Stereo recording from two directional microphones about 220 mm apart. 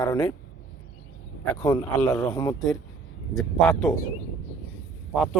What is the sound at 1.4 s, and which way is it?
Speech, 15° left (ahead or behind).